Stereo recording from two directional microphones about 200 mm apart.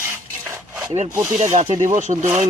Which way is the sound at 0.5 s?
10° right (ahead or behind).